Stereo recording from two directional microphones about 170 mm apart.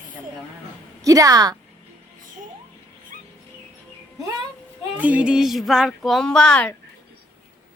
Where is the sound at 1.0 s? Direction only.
20° right (ahead or behind).